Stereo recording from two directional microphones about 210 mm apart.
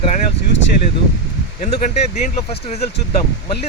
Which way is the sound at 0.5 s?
60° left (ahead or behind).